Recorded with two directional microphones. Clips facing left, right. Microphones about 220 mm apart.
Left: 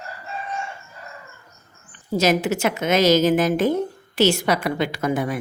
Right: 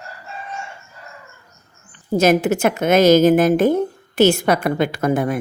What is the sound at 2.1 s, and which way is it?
Speech, 55° right (ahead or behind).